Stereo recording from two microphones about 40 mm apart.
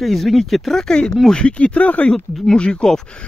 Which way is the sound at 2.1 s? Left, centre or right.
Left.